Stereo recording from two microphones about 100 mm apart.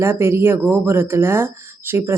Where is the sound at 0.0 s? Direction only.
25° right (ahead or behind).